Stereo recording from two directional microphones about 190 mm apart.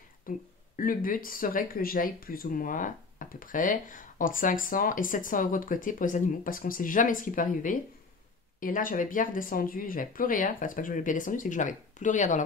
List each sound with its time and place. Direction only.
0.3 s speech: 45° left (ahead or behind)